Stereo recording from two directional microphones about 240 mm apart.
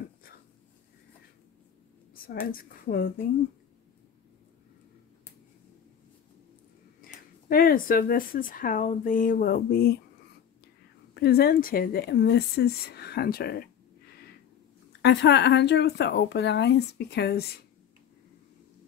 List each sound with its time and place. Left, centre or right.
2.5 s speech: left
7.4 s speech: left
11.1 s speech: left
14.9 s speech: left